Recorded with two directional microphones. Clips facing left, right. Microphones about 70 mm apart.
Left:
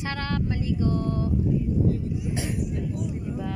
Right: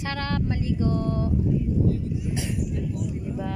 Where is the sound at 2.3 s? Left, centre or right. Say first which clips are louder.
Even; left.